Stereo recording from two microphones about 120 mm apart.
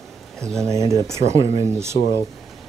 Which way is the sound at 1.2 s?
70° right (ahead or behind).